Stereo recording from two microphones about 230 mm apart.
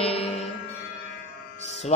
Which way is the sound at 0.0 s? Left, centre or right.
Left.